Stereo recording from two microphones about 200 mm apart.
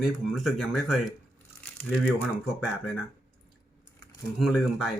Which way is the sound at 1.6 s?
10° left (ahead or behind).